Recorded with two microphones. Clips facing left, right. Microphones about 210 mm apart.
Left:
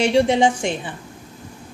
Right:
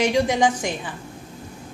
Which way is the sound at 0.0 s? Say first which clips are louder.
Left 3 dB; 25° left (ahead or behind).